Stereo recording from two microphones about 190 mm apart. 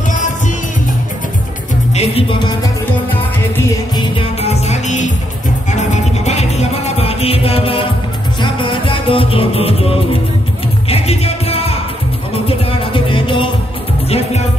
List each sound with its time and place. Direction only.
2.0 s music: 30° left (ahead or behind)
3.9 s music: 35° left (ahead or behind)